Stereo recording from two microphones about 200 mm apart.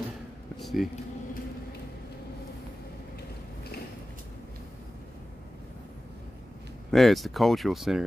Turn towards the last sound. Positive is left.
turn(degrees=0)  # may be behind; listen again after turning